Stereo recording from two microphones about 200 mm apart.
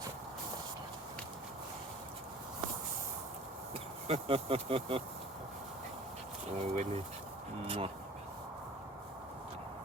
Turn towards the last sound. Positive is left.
turn(degrees=-30)  # may be behind; listen again after turning